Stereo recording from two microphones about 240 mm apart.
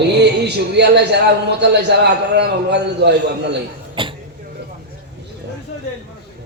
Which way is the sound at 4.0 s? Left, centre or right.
Right.